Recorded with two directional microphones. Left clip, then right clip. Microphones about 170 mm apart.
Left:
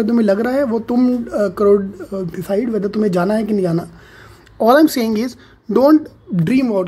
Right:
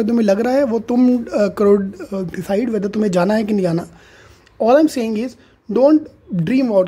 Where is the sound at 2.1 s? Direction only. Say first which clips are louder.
Left 1 dB; 25° right (ahead or behind).